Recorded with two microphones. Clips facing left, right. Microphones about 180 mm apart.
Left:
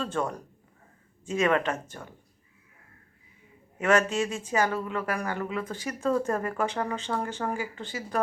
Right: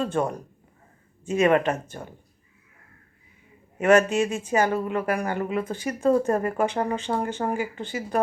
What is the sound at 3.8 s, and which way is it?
A man's voice, 15° right (ahead or behind).